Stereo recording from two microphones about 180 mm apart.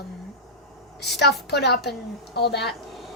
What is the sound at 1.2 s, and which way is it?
A woman's voice, 70° left (ahead or behind).